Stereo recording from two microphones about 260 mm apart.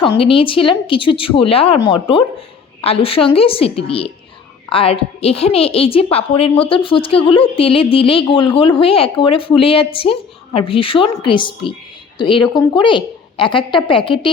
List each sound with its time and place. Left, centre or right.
0.2 s a woman's voice: left